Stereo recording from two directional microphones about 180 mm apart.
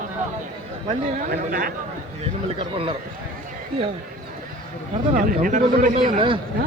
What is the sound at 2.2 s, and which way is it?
Speech, 35° right (ahead or behind).